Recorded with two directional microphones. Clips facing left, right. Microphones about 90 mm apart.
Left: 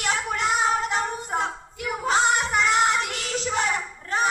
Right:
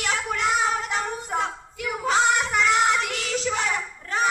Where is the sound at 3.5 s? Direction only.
40° left (ahead or behind).